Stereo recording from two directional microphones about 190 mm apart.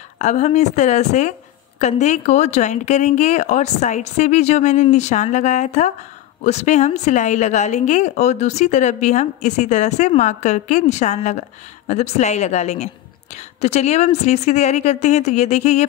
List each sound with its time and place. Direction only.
0.2 s a woman's voice: 40° left (ahead or behind)